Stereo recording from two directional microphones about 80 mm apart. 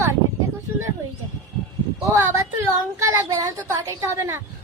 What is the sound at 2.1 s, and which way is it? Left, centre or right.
Child singing, right.